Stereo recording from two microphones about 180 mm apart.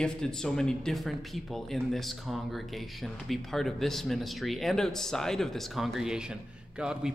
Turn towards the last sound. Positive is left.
turn(degrees=-5)  # may be behind; listen again after turning